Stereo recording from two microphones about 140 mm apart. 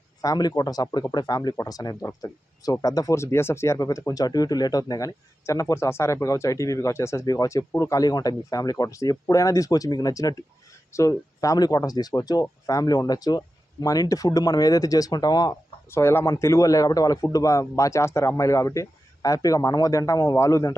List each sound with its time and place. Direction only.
0.2 s speech: 30° left (ahead or behind)